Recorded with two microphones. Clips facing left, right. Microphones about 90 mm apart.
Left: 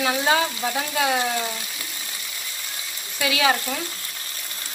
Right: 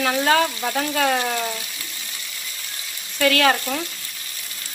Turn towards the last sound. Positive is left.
turn(degrees=5)  # may be behind; listen again after turning